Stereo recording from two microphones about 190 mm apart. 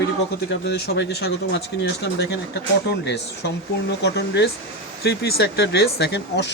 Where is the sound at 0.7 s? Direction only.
60° left (ahead or behind).